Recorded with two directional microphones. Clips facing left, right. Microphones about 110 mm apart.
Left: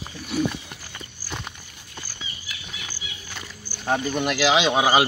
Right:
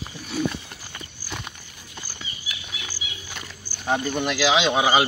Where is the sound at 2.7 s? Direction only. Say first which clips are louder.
Even; 5° right (ahead or behind).